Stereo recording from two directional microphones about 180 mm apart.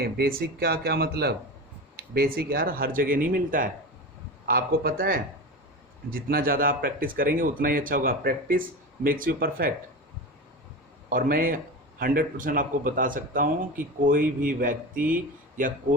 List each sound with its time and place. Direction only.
0.0 s speech: 60° right (ahead or behind)
11.1 s speech: 50° right (ahead or behind)